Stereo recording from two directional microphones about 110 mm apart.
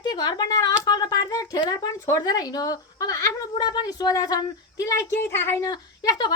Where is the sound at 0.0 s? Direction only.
40° left (ahead or behind).